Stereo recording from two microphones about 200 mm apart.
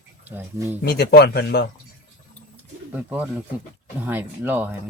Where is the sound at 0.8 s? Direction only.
55° left (ahead or behind).